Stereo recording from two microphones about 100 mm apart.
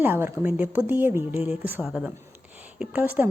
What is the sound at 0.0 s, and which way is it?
A woman's voice, 20° right (ahead or behind).